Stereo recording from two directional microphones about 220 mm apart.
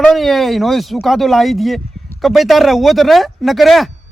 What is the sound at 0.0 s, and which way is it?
Speech, centre (ahead or behind).